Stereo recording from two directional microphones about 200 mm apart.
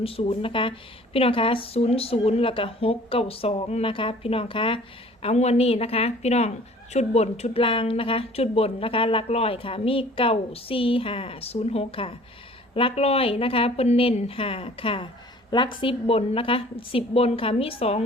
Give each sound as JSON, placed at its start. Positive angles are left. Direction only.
{"t": 0.0, "sound": "a woman's voice", "side_deg": 30}